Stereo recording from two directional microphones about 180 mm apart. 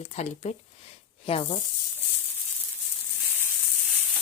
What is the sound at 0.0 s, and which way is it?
Speech, 40° left (ahead or behind).